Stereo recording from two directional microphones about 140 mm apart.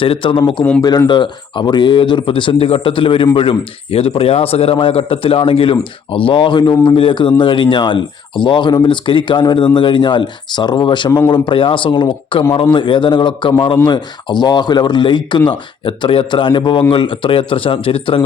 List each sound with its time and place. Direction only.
0.0 s speech: 40° left (ahead or behind)